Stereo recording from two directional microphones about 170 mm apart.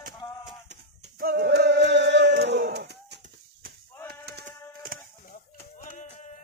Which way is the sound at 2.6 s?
75° right (ahead or behind).